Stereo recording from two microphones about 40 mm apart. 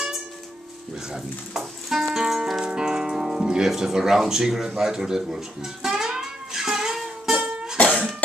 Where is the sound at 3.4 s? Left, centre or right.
Centre.